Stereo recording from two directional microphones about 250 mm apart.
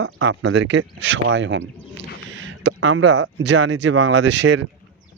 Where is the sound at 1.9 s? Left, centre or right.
Right.